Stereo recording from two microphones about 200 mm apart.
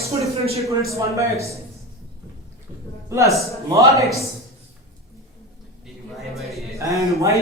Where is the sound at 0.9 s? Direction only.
15° right (ahead or behind).